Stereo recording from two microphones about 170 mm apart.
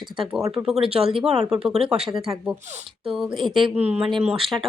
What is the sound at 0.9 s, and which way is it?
Speech, 5° right (ahead or behind).